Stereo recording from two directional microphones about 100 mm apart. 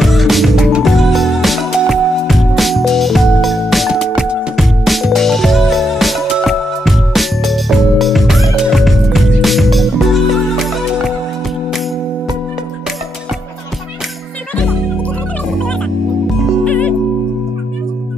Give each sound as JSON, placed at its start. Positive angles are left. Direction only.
{"t": 0.0, "sound": "music", "side_deg": 0}
{"t": 16.6, "sound": "music", "side_deg": 15}